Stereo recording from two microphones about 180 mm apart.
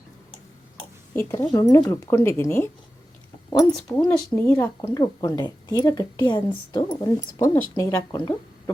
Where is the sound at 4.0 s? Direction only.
5° left (ahead or behind).